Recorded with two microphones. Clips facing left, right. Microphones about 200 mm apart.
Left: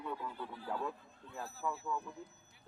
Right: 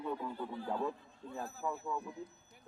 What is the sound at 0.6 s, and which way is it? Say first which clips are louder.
Speech: right 2 dB; 20° right (ahead or behind).